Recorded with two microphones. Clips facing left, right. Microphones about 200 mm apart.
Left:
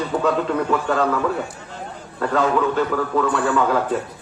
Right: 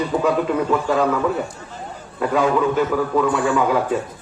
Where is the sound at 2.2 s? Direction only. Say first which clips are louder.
Right 1 dB; 10° right (ahead or behind).